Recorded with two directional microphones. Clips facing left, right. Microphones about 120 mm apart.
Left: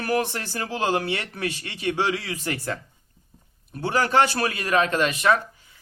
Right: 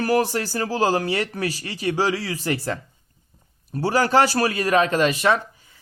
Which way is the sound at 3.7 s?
35° right (ahead or behind).